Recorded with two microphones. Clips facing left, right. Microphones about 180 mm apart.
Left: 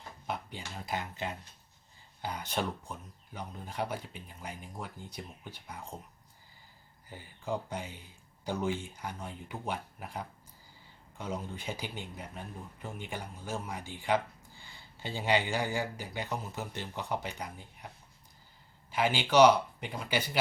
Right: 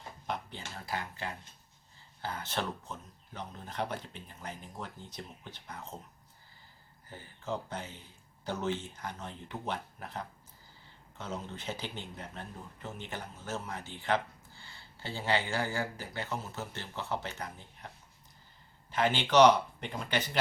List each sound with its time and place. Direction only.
0.3 s a sound: 5° left (ahead or behind)
0.8 s speech: 20° left (ahead or behind)
7.1 s speech: 15° left (ahead or behind)